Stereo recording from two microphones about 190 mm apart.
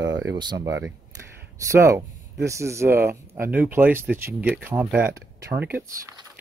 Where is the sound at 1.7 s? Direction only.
15° right (ahead or behind).